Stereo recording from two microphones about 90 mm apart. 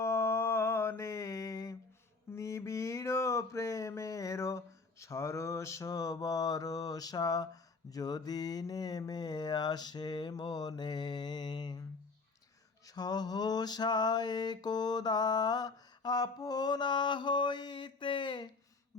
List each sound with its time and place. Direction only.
0.0 s mantra: 30° left (ahead or behind)
2.3 s a sound: 35° left (ahead or behind); by 11.9 s 50° left (ahead or behind)
12.8 s mantra: 45° left (ahead or behind)